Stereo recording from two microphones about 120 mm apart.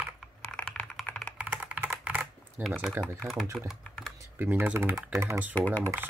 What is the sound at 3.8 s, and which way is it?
Computer keyboard, 5° left (ahead or behind).